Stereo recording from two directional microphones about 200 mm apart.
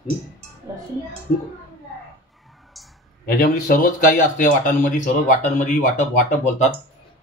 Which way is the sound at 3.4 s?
40° left (ahead or behind).